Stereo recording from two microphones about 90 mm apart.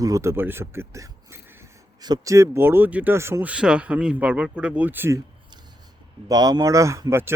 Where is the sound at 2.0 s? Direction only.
50° right (ahead or behind).